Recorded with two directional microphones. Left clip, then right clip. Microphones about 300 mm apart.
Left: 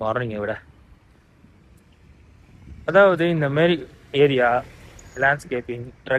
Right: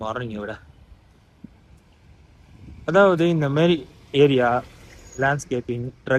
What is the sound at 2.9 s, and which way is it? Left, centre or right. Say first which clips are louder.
Speech: left 1 dB; centre.